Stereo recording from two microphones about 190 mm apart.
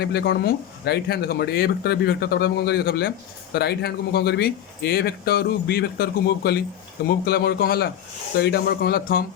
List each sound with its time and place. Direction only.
0.0 s speech: 60° left (ahead or behind)